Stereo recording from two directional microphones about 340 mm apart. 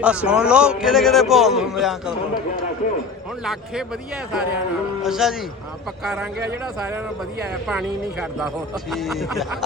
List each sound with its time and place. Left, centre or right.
0.0 s a man's voice: centre
3.4 s a man's voice: centre
5.0 s a man's voice: centre
7.7 s a man's voice: centre